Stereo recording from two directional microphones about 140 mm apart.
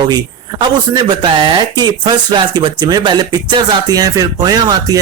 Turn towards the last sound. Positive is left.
turn(degrees=-30)  # may be behind; listen again after turning